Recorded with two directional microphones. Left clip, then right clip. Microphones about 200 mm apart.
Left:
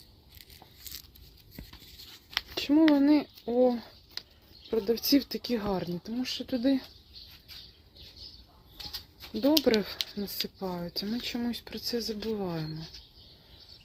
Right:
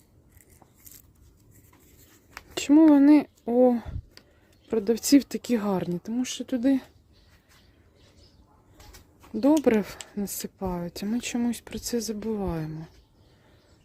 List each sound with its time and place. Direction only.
2.6 s speech: 40° right (ahead or behind)
9.4 s speech: 35° right (ahead or behind)